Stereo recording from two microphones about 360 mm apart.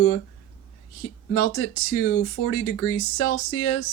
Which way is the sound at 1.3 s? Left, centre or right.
Left.